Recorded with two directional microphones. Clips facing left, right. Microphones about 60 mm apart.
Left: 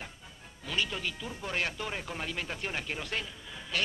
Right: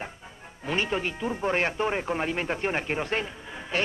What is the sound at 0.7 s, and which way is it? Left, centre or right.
Speech, right.